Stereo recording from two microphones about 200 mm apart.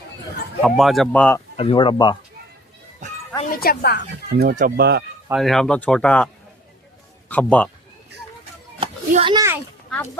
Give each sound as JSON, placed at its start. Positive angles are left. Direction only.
{"t": 0.6, "sound": "speech", "side_deg": 0}
{"t": 1.5, "sound": "speech", "side_deg": 25}
{"t": 3.5, "sound": "speech", "side_deg": 45}
{"t": 4.4, "sound": "speech", "side_deg": -50}
{"t": 5.3, "sound": "a man's voice", "side_deg": 0}
{"t": 8.8, "sound": "a sound", "side_deg": -25}